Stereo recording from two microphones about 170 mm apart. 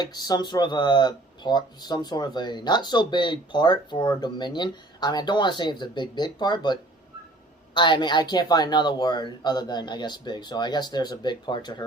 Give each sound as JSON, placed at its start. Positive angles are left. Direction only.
{"t": 0.0, "sound": "speech", "side_deg": 25}